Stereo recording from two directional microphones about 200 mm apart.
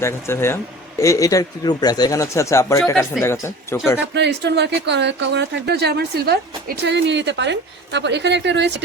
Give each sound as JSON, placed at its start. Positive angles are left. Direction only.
{"t": 0.0, "sound": "speech", "side_deg": 15}
{"t": 4.1, "sound": "speech", "side_deg": -60}